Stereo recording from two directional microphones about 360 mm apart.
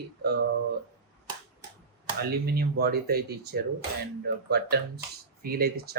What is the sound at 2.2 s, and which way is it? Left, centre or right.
Speech, right.